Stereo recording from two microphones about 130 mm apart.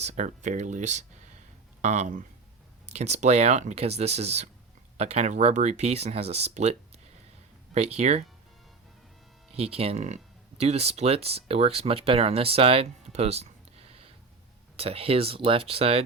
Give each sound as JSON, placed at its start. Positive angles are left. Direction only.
{"t": 0.0, "sound": "speech", "side_deg": -65}
{"t": 2.8, "sound": "speech", "side_deg": -60}
{"t": 9.5, "sound": "speech", "side_deg": -50}